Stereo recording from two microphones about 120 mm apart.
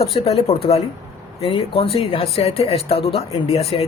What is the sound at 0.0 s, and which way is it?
Speech, 55° left (ahead or behind).